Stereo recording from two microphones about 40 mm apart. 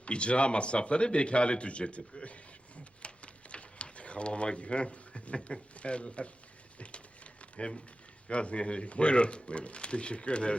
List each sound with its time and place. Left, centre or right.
0.0 s speech: left
3.0 s a sound: left
5.7 s speech: left
7.5 s speech: left